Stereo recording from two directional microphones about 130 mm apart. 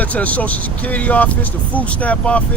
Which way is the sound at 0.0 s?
10° left (ahead or behind).